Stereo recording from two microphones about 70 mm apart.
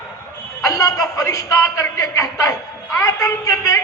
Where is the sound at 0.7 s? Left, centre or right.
Left.